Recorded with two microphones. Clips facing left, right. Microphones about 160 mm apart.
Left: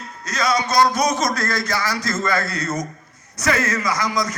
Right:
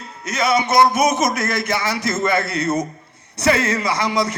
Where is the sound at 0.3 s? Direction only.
25° right (ahead or behind).